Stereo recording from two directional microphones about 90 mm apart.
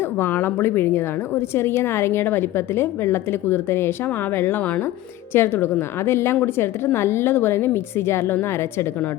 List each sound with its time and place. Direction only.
0.2 s a woman's voice: 25° left (ahead or behind)